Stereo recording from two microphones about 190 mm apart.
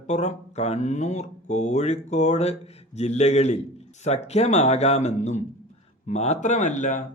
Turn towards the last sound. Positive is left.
turn(degrees=40)  # may be behind; listen again after turning